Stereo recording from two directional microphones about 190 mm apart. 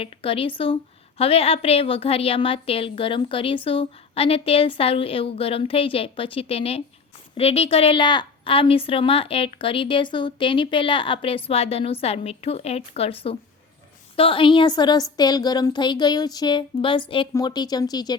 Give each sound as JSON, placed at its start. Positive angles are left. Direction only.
{"t": 0.0, "sound": "a woman's voice", "side_deg": 30}